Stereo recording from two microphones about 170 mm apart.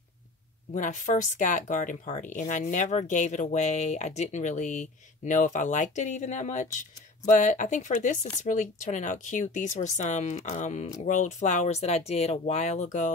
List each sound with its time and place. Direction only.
0.7 s speech: 50° left (ahead or behind)